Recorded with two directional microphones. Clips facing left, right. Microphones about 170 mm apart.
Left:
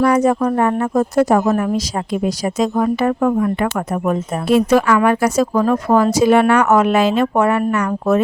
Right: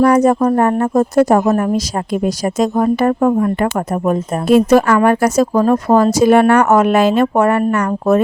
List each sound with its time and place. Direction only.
0.0 s speech: 45° right (ahead or behind)